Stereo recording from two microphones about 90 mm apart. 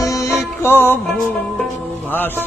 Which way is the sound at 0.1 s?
40° left (ahead or behind).